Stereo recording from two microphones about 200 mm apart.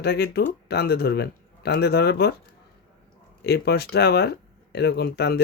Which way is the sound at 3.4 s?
55° left (ahead or behind).